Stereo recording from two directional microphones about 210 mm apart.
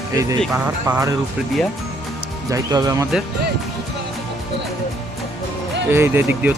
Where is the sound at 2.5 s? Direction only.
15° right (ahead or behind).